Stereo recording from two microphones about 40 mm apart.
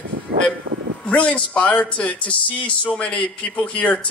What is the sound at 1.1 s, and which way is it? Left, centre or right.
Speech, left.